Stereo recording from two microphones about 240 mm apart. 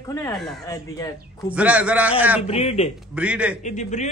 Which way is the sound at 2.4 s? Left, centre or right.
Left.